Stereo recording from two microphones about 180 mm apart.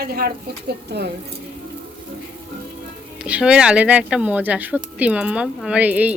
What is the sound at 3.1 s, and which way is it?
A woman's voice, 5° right (ahead or behind).